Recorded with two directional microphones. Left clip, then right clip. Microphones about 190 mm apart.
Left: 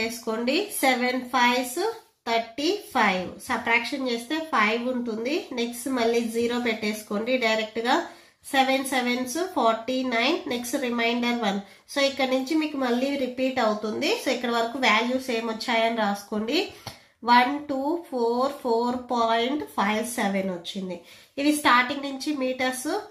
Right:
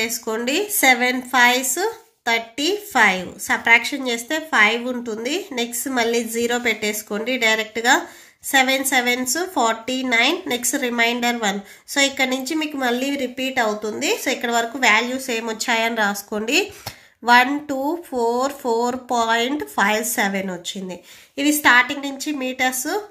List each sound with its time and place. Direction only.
0.0 s a woman's voice: 40° right (ahead or behind)